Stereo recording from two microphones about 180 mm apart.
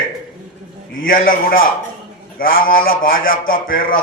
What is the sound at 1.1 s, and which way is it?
A man's voice, 50° left (ahead or behind).